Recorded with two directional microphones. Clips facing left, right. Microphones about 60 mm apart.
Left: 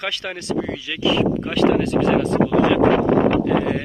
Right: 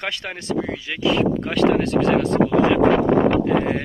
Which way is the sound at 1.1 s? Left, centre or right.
Right.